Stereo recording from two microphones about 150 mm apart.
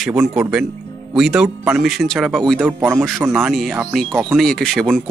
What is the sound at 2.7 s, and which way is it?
Speech, 15° right (ahead or behind).